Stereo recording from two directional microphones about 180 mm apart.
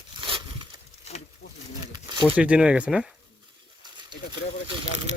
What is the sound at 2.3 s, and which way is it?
Speech, 5° right (ahead or behind).